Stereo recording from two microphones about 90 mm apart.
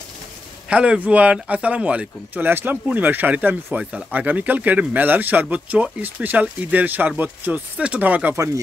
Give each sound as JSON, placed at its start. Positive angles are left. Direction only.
{"t": 0.7, "sound": "speech", "side_deg": -15}